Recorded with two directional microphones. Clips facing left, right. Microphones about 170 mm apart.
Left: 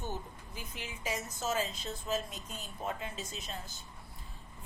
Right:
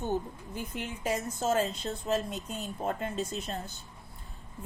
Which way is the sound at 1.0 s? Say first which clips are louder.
Right 6 dB; 60° right (ahead or behind).